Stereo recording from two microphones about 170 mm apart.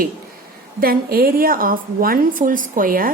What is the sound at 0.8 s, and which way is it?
A woman's voice, 60° right (ahead or behind).